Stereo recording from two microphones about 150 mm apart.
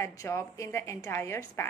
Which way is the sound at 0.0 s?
20° left (ahead or behind).